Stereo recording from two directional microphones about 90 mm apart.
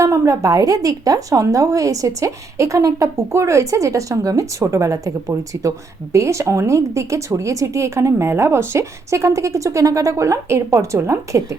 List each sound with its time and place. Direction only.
0.0 s speech: 35° right (ahead or behind)